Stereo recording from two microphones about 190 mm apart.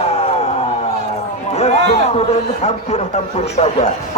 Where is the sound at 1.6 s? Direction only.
35° left (ahead or behind).